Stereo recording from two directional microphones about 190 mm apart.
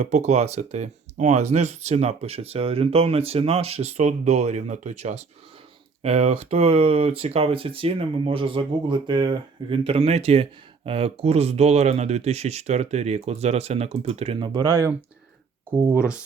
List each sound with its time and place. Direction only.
0.0 s speech: 35° right (ahead or behind); by 14.9 s 15° right (ahead or behind)